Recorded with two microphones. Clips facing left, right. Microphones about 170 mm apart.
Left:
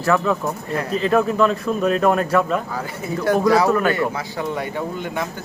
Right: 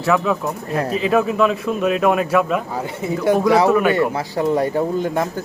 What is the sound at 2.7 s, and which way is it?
Speech, 25° right (ahead or behind).